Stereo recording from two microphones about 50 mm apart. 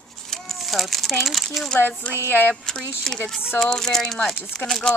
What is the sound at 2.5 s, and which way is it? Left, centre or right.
Speech, centre.